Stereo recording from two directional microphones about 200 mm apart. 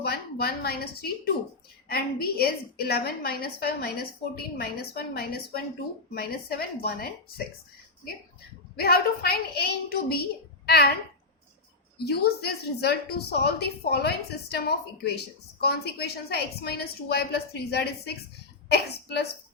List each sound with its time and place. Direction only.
0.0 s a woman's voice: 50° left (ahead or behind)
8.7 s a woman's voice: 50° left (ahead or behind)
11.9 s a woman's voice: 55° left (ahead or behind)